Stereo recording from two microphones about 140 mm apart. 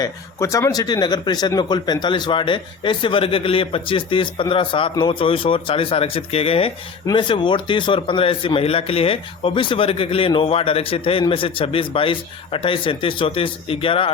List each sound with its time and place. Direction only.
0.0 s a man's voice: 20° left (ahead or behind); by 14.1 s 40° left (ahead or behind)